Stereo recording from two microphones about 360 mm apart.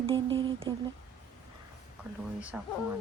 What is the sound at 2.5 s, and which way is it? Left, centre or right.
Speech, centre.